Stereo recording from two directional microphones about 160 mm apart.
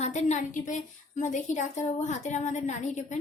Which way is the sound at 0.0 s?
45° left (ahead or behind).